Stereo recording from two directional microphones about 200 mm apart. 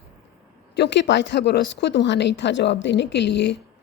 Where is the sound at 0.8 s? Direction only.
60° left (ahead or behind).